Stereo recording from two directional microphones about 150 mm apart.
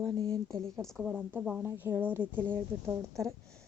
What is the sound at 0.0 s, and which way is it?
Speech, 30° right (ahead or behind).